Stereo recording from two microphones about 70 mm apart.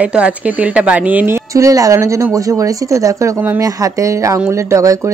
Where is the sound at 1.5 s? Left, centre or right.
Right.